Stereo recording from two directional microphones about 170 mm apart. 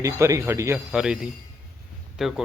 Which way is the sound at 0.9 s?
5° right (ahead or behind).